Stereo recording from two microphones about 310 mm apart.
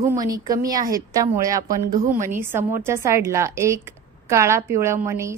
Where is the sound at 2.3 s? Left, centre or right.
Centre.